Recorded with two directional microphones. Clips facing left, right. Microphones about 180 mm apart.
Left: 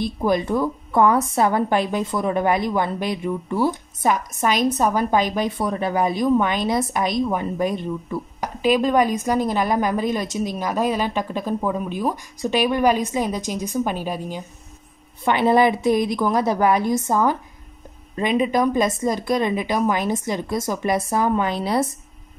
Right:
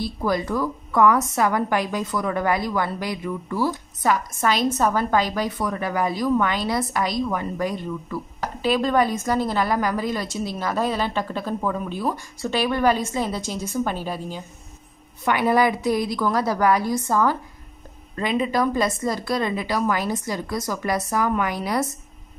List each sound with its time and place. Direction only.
0.0 s a woman's voice: 20° left (ahead or behind)
15.2 s a woman's voice: 25° left (ahead or behind)